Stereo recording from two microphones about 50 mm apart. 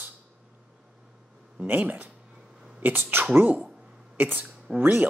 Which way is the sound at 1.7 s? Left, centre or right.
Right.